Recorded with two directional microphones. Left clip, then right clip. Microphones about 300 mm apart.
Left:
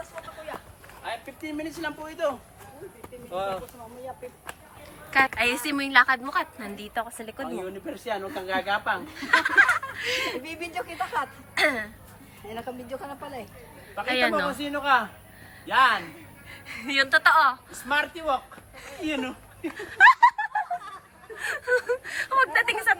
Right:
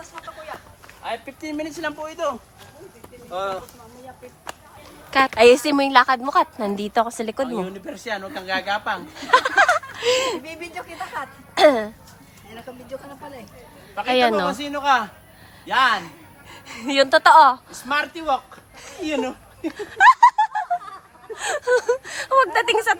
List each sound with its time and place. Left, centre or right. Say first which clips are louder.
1.0 s speech: right 5 dB; right
3.3 s speech: right 4 dB; right
5.1 s a woman's voice: right 9 dB; centre
8.4 s speech: right 3 dB; right
9.1 s speech: right 4 dB; centre
10.4 s speech: even; centre
11.5 s a woman's voice: right 9 dB; centre
14.1 s a woman's voice: right 6 dB; centre
14.6 s speech: right 2 dB; right
16.0 s a woman's voice: right 2 dB; centre
18.8 s a sound: right 5 dB; centre
19.7 s snicker: right 3 dB; centre
21.3 s speech: right 5 dB; centre